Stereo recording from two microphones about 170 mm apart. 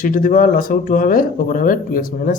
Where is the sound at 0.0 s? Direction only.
55° left (ahead or behind).